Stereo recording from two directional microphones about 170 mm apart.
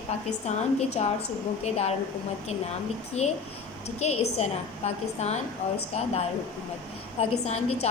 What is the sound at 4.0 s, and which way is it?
A woman's voice, 40° left (ahead or behind).